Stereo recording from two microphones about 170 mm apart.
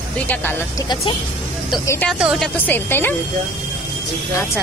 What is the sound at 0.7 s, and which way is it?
Speech, 25° left (ahead or behind).